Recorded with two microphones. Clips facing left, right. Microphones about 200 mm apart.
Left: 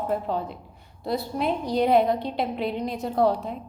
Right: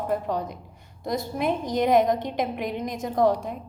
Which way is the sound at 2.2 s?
15° right (ahead or behind).